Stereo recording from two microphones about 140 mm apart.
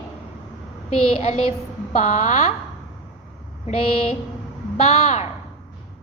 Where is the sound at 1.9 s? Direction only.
55° left (ahead or behind).